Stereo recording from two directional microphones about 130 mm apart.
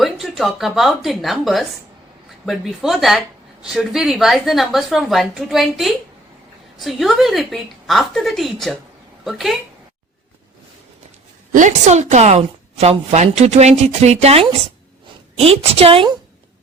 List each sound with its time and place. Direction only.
0.0 s a woman's voice: centre (ahead or behind)
11.5 s a woman's voice: 65° right (ahead or behind); by 16.1 s 45° right (ahead or behind)